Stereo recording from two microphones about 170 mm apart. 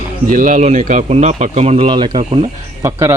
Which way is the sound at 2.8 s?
15° right (ahead or behind).